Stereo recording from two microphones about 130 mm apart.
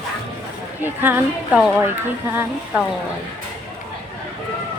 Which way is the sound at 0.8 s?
15° right (ahead or behind).